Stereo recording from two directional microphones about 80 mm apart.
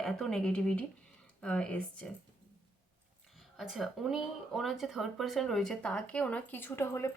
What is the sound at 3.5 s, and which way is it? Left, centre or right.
Speech, centre.